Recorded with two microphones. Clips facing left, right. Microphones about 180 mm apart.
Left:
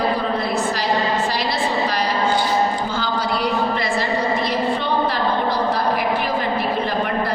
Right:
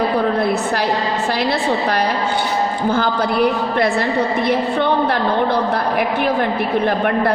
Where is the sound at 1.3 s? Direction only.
55° right (ahead or behind).